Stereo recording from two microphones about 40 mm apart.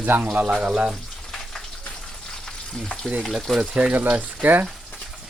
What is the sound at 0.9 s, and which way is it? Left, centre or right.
Frying, centre.